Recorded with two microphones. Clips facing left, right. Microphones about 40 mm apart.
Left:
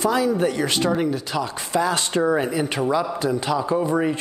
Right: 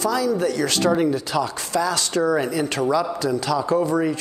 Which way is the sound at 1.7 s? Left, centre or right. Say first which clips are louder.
Left 3 dB; left.